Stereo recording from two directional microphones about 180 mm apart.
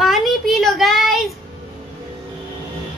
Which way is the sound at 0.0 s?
Centre (ahead or behind).